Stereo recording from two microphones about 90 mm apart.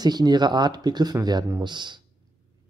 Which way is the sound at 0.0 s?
50° right (ahead or behind).